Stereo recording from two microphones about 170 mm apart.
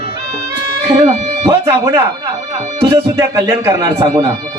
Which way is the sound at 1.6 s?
20° right (ahead or behind).